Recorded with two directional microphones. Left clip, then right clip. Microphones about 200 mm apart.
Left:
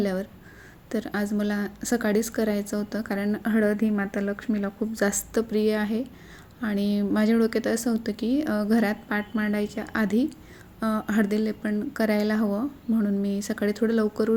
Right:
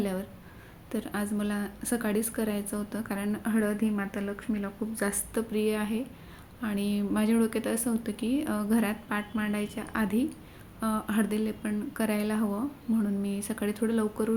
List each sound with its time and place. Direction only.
0.0 s speech: 25° left (ahead or behind)